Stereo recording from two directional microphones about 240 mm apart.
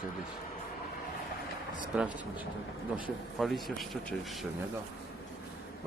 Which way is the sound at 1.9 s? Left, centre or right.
Centre.